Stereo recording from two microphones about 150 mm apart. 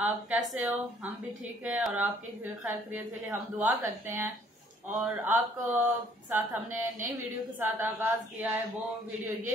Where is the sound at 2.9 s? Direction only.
15° right (ahead or behind).